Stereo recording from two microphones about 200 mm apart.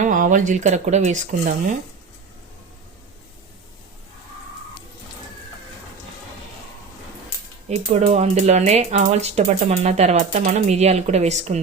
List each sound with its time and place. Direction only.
0.0 s speech: 40° right (ahead or behind)
7.7 s speech: 35° right (ahead or behind)